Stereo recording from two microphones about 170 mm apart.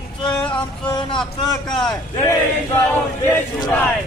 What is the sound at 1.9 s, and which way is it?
Crowd, 15° left (ahead or behind).